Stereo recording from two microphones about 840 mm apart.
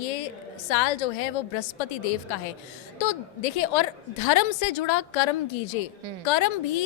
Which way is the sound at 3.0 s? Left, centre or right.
Left.